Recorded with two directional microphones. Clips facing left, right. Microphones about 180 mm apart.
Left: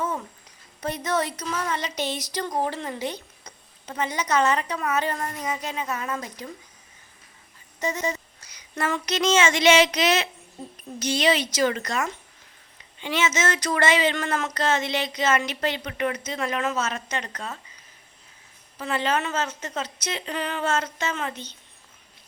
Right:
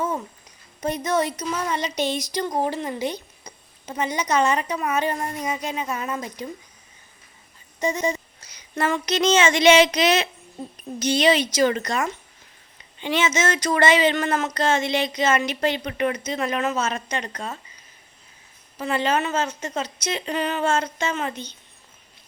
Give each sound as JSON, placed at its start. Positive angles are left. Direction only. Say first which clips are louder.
{"t": 1.0, "sound": "a woman's voice", "louder": "right 2 dB", "side_deg": -15}
{"t": 7.8, "sound": "a woman's voice", "louder": "right 4 dB", "side_deg": -15}
{"t": 13.0, "sound": "a woman's voice", "louder": "right 2 dB", "side_deg": -20}
{"t": 18.8, "sound": "speech", "louder": "right 3 dB", "side_deg": -15}